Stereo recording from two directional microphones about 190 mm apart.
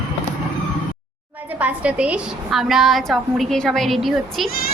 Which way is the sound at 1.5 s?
5° right (ahead or behind).